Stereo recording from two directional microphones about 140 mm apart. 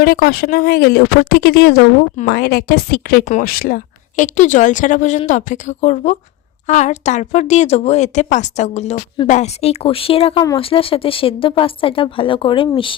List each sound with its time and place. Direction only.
0.0 s speech: 90° left
4.2 s speech: 60° left (ahead or behind); by 13.0 s 40° left (ahead or behind)